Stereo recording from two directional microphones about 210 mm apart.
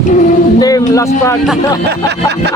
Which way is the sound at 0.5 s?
15° left (ahead or behind).